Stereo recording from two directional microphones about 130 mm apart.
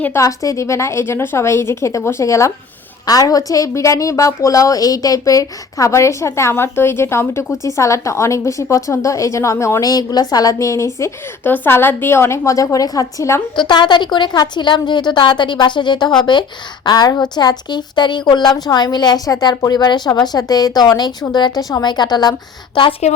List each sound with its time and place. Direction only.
0.0 s a woman's voice: 20° left (ahead or behind)
13.6 s a woman's voice: 35° left (ahead or behind)